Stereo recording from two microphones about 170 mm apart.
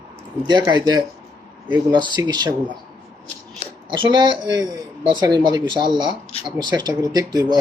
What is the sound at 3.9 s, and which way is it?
Speech, 25° right (ahead or behind).